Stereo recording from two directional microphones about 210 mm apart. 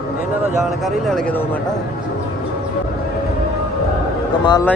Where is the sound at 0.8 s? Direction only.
5° left (ahead or behind).